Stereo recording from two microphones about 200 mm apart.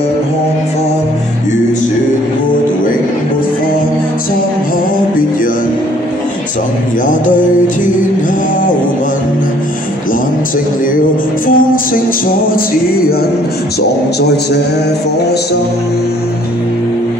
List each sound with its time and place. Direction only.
7.1 s music: 40° left (ahead or behind)
11.4 s music: 45° left (ahead or behind)